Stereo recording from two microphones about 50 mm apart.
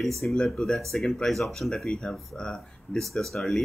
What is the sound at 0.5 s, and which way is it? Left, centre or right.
Speech, centre.